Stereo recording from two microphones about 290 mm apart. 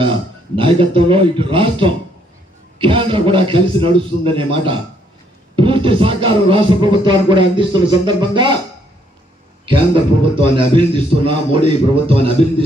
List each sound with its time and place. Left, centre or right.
0.5 s music: centre
9.6 s music: centre